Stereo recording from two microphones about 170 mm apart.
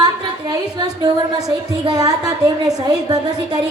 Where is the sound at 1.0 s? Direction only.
25° right (ahead or behind).